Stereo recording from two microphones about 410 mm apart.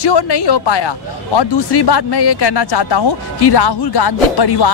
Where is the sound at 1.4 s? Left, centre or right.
Left.